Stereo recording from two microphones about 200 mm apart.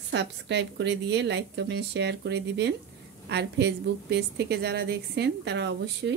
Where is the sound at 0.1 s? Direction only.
60° right (ahead or behind).